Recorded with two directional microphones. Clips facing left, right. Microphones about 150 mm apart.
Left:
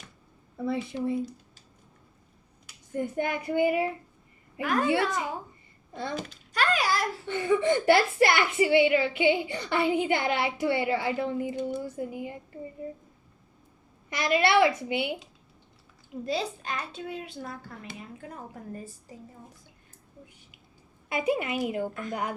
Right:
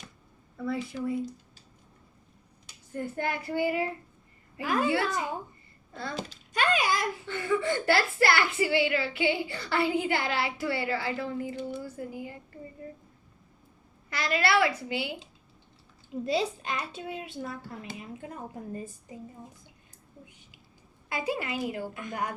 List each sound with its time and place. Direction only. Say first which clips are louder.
0.5 s a woman's voice: left 2 dB; 25° left (ahead or behind)
2.9 s a woman's voice: left 3 dB; 20° left (ahead or behind)
6.7 s a child's voice: even; 20° right (ahead or behind)
7.3 s a woman's voice: left 5 dB; 20° left (ahead or behind)
14.1 s a woman's voice: left 3 dB; 20° left (ahead or behind)
16.2 s a child's voice: right 2 dB; 20° right (ahead or behind)
21.1 s a woman's voice: left 4 dB; 20° left (ahead or behind)